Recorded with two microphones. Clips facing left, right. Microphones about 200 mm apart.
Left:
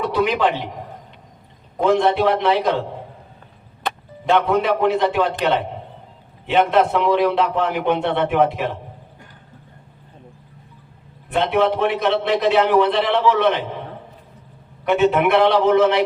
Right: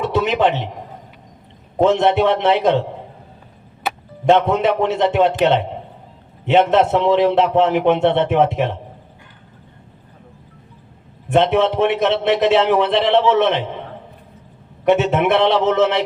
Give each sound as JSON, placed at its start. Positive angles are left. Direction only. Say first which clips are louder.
{"t": 0.0, "sound": "a sound", "louder": "right 2 dB", "side_deg": -25}
{"t": 1.8, "sound": "a man's voice", "louder": "right 2 dB", "side_deg": -25}
{"t": 3.9, "sound": "music", "louder": "right 1 dB", "side_deg": -5}
{"t": 4.3, "sound": "a man's voice", "louder": "right 3 dB", "side_deg": -25}
{"t": 11.3, "sound": "a man's voice", "louder": "right 3 dB", "side_deg": -25}
{"t": 14.8, "sound": "a man's voice", "louder": "right 1 dB", "side_deg": -25}